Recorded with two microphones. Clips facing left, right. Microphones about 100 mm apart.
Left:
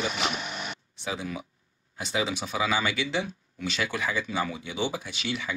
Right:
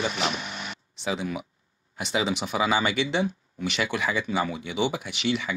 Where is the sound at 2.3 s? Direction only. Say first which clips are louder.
Right 4 dB; 65° right (ahead or behind).